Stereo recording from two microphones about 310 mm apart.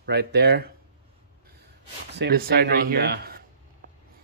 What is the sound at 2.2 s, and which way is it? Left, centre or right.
Speech, right.